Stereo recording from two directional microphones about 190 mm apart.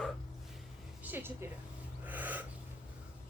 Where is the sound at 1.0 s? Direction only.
10° right (ahead or behind).